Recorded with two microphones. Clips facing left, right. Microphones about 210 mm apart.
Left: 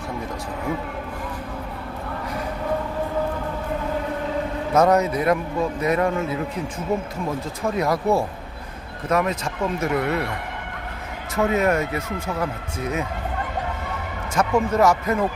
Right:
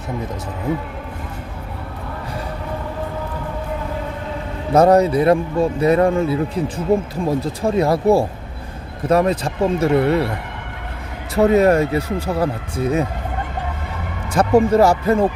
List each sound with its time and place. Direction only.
4.7 s speech: 30° right (ahead or behind)
11.3 s speech: 35° right (ahead or behind)
14.3 s speech: 35° right (ahead or behind)